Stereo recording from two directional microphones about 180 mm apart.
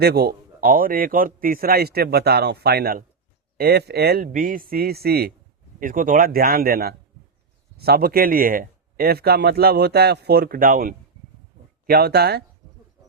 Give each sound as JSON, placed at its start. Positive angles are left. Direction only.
{"t": 0.0, "sound": "speech", "side_deg": -60}
{"t": 5.8, "sound": "speech", "side_deg": -50}